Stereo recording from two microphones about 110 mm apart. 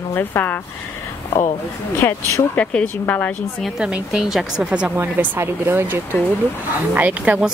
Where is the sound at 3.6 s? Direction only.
10° right (ahead or behind).